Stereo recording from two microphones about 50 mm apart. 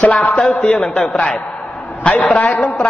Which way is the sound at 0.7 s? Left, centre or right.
Centre.